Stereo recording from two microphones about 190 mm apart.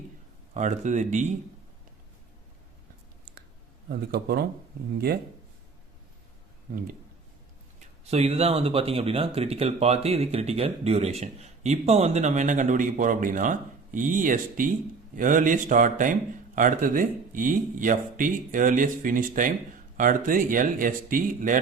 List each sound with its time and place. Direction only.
0.5 s speech: 40° right (ahead or behind)
3.8 s speech: 55° right (ahead or behind)
7.8 s speech: 35° right (ahead or behind)